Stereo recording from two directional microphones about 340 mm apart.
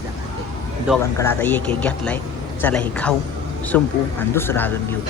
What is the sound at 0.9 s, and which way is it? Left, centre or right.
Speech, centre.